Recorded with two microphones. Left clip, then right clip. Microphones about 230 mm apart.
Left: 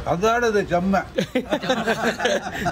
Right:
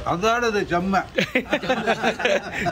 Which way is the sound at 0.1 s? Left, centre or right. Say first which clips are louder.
Left 2 dB; centre.